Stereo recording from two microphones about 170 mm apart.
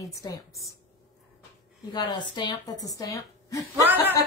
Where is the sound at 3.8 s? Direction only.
10° right (ahead or behind).